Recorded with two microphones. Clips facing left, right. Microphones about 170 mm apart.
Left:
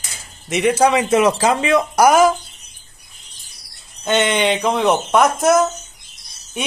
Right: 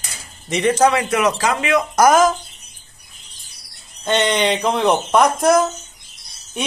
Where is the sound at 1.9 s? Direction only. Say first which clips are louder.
Even; 10° left (ahead or behind).